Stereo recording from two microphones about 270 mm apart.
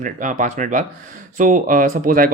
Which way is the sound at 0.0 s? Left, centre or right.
Right.